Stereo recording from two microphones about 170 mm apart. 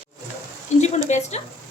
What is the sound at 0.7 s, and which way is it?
Speech, 40° left (ahead or behind).